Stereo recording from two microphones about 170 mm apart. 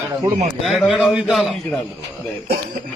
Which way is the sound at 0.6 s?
Centre (ahead or behind).